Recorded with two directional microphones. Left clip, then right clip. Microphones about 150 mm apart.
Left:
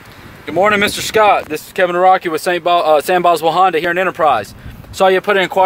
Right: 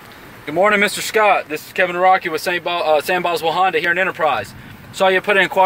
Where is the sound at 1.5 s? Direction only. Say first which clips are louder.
Left 3 dB; 35° left (ahead or behind).